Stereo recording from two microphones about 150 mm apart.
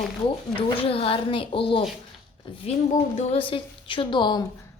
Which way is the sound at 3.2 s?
40° left (ahead or behind).